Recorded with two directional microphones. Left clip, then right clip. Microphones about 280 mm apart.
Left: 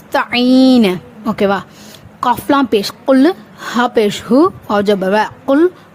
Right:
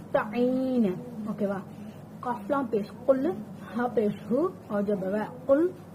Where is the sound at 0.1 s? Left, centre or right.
Left.